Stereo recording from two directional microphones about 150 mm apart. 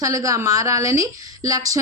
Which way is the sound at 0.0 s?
20° right (ahead or behind).